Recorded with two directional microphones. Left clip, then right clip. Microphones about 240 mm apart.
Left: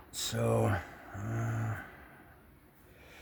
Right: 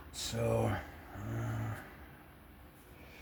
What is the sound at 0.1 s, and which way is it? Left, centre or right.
Speech, left.